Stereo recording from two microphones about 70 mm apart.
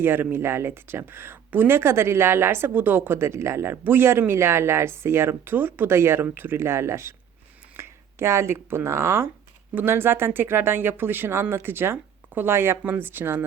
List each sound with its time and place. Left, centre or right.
0.0 s speech: right
9.7 s speech: right